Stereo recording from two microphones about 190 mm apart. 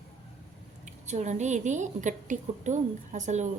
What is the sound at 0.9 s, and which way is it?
A woman's voice, 40° right (ahead or behind).